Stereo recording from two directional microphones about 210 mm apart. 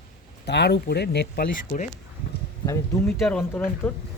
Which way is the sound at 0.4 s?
55° left (ahead or behind).